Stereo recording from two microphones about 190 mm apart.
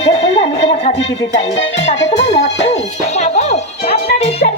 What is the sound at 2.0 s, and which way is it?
Music, 35° left (ahead or behind).